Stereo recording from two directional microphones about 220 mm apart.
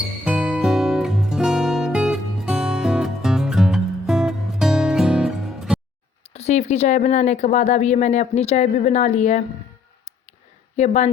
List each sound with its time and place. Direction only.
0.3 s music: 5° right (ahead or behind)
6.3 s speech: 30° left (ahead or behind)
10.8 s speech: 30° left (ahead or behind)